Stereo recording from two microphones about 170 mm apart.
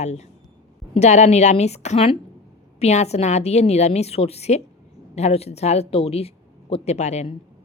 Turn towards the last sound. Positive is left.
turn(degrees=40)  # may be behind; listen again after turning